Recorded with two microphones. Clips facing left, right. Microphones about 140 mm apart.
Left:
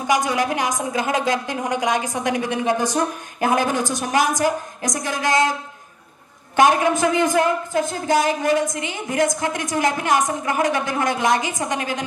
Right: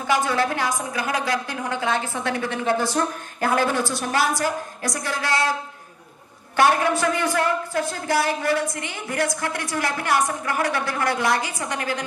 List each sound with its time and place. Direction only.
0.0 s a woman's voice: 15° left (ahead or behind)